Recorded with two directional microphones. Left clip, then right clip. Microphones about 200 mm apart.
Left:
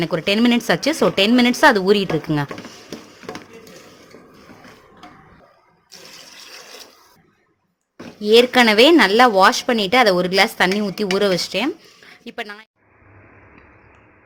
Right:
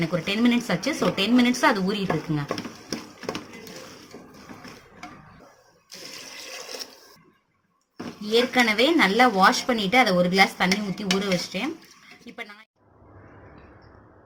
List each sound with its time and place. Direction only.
0.0 s speech: 50° left (ahead or behind)
8.2 s speech: 50° left (ahead or behind)